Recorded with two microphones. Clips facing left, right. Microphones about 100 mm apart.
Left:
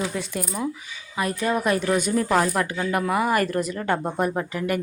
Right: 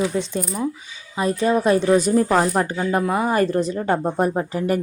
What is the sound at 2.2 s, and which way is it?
Speech, 25° right (ahead or behind).